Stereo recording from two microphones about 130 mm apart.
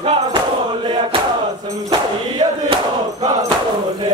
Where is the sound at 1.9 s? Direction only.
40° right (ahead or behind).